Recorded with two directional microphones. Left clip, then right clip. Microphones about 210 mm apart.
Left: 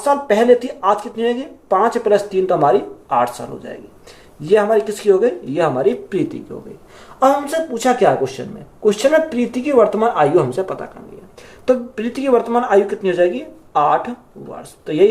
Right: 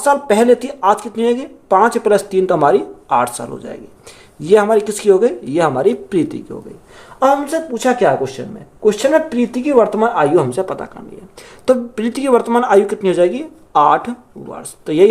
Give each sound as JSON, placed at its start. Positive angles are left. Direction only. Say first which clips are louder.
{"t": 0.0, "sound": "speech", "louder": "right 2 dB", "side_deg": -50}
{"t": 7.2, "sound": "speech", "louder": "right 1 dB", "side_deg": -25}